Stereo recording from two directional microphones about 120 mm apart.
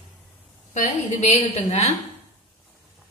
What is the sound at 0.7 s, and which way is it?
A woman's voice, 65° left (ahead or behind).